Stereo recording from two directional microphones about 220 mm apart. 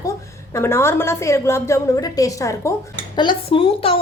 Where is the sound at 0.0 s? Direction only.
15° left (ahead or behind).